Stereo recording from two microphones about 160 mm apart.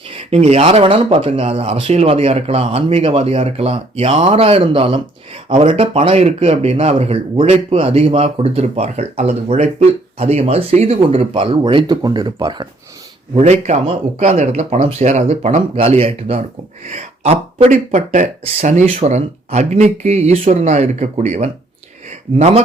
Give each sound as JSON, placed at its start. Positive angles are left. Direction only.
{"t": 0.3, "sound": "speech", "side_deg": -40}
{"t": 13.3, "sound": "speech", "side_deg": -45}